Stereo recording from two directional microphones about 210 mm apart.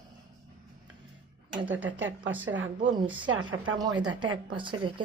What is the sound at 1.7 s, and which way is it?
Speech, 10° right (ahead or behind).